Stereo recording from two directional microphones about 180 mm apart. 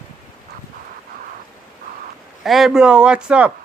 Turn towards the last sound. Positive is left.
turn(degrees=-5)  # may be behind; listen again after turning